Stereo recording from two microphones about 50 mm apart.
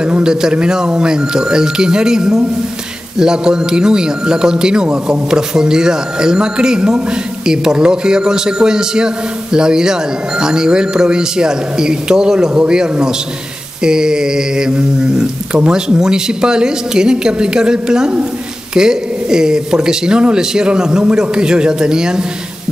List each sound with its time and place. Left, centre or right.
0.0 s a man's voice: centre